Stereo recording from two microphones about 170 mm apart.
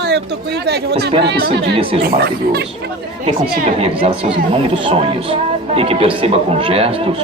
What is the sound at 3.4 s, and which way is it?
Speech, 45° right (ahead or behind).